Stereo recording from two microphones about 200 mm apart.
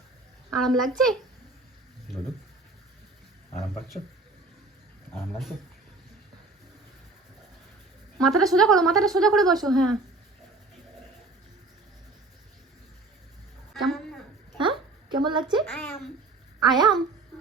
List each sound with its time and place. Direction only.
0.6 s a woman's voice: centre (ahead or behind)
8.2 s a woman's voice: centre (ahead or behind)
13.8 s a woman's voice: centre (ahead or behind)
14.6 s music: 25° right (ahead or behind)
16.6 s a woman's voice: 20° right (ahead or behind)